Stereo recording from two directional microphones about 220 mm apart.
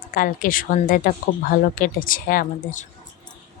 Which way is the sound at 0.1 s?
40° left (ahead or behind).